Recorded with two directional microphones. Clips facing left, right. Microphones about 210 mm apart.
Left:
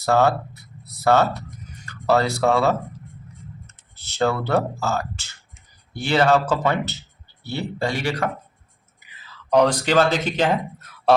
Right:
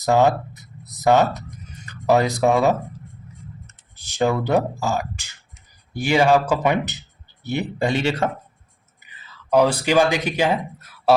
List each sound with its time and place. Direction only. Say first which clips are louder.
0.0 s speech: right 1 dB; 15° right (ahead or behind)
3.9 s speech: right 1 dB; 15° right (ahead or behind)
9.5 s speech: even; 5° right (ahead or behind)